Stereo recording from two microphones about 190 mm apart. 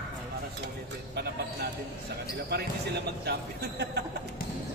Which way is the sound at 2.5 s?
60° right (ahead or behind).